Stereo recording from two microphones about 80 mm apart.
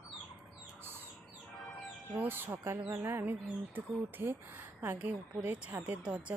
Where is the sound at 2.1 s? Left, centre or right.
Right.